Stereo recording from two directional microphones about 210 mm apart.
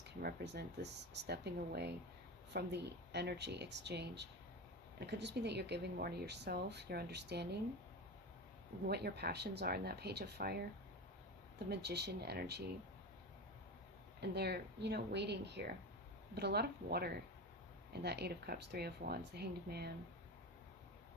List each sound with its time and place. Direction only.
0.0 s speech: 50° right (ahead or behind)
8.9 s speech: 50° right (ahead or behind)
11.7 s speech: 50° right (ahead or behind)
14.2 s speech: 50° right (ahead or behind)